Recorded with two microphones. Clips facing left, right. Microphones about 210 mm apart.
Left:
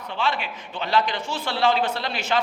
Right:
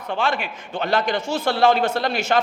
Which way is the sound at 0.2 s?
50° right (ahead or behind).